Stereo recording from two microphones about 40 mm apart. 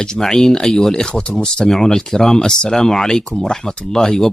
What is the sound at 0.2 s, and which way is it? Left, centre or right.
Speech, centre.